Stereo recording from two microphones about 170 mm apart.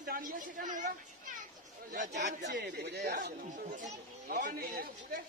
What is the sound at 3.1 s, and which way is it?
Speech, 55° right (ahead or behind).